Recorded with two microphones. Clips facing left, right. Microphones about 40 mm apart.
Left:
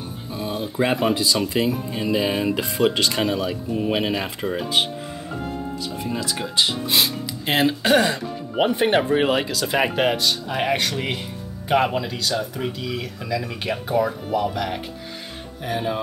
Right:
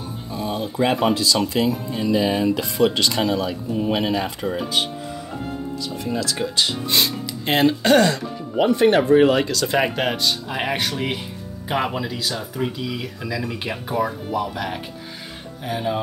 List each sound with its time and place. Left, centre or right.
0.8 s speech: left
1.5 s speech: centre
5.9 s speech: centre
8.1 s speech: centre